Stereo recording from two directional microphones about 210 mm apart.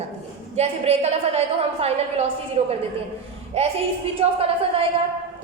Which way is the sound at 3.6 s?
30° right (ahead or behind).